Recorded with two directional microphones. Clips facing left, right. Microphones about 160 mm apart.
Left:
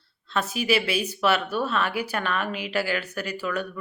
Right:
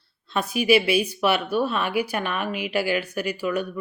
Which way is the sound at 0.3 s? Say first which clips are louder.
Right 4 dB; 10° right (ahead or behind).